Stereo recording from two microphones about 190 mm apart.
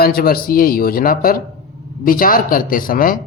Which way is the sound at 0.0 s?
55° left (ahead or behind).